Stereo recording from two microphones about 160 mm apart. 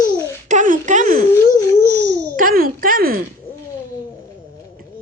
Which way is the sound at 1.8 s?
90° right.